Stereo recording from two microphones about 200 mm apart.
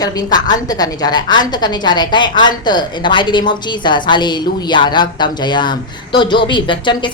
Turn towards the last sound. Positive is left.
turn(degrees=25)  # may be behind; listen again after turning